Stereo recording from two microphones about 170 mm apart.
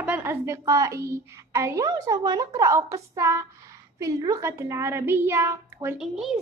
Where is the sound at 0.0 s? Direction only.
10° right (ahead or behind).